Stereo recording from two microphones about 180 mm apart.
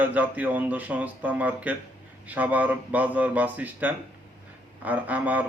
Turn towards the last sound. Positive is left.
turn(degrees=-10)  # may be behind; listen again after turning